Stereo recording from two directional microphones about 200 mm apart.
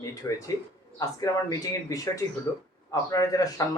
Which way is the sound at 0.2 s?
15° left (ahead or behind).